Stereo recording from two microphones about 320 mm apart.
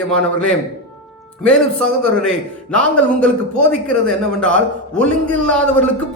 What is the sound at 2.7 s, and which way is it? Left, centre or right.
Speech, centre.